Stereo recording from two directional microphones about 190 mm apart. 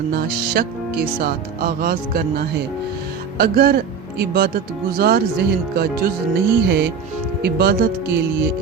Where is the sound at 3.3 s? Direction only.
55° right (ahead or behind).